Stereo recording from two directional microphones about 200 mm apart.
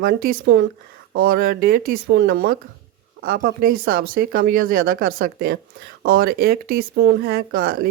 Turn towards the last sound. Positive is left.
turn(degrees=-50)  # may be behind; listen again after turning